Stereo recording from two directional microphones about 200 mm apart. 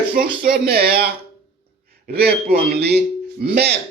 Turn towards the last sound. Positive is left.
turn(degrees=-55)  # may be behind; listen again after turning